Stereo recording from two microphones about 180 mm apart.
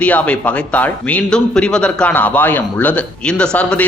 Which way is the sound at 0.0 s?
10° left (ahead or behind).